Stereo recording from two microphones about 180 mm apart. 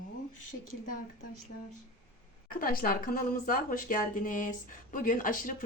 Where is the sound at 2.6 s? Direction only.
55° left (ahead or behind).